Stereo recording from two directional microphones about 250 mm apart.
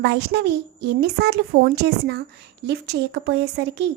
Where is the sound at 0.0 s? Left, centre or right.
Right.